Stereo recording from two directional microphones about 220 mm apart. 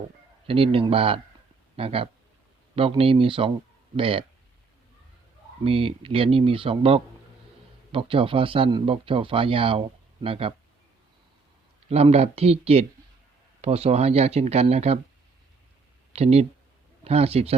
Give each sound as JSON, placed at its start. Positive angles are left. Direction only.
{"t": 0.4, "sound": "speech", "side_deg": -25}
{"t": 5.6, "sound": "speech", "side_deg": -25}
{"t": 11.9, "sound": "speech", "side_deg": -30}
{"t": 16.1, "sound": "speech", "side_deg": -30}